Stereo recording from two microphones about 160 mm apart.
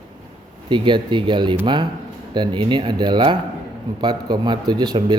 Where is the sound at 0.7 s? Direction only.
30° right (ahead or behind).